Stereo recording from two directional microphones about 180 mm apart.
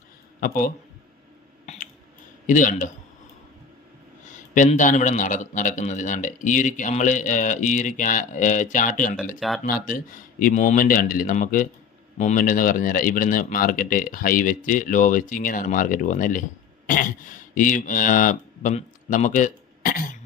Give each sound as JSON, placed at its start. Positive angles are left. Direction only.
{"t": 0.3, "sound": "a man's voice", "side_deg": 55}
{"t": 1.6, "sound": "a sound", "side_deg": 40}
{"t": 2.5, "sound": "a man's voice", "side_deg": 45}
{"t": 4.3, "sound": "a man's voice", "side_deg": 45}
{"t": 9.4, "sound": "speech", "side_deg": 0}
{"t": 9.8, "sound": "a man's voice", "side_deg": 50}